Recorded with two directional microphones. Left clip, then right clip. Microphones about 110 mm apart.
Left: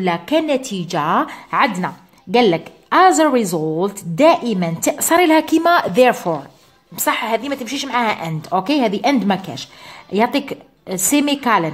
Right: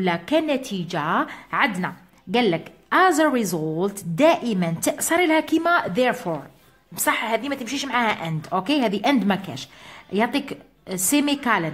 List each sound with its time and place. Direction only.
0.0 s a woman's voice: 10° left (ahead or behind)
0.6 s a woman's voice: 25° left (ahead or behind)
3.4 s speech: 5° left (ahead or behind)
4.2 s a woman's voice: 15° left (ahead or behind)
4.9 s a woman's voice: 25° left (ahead or behind)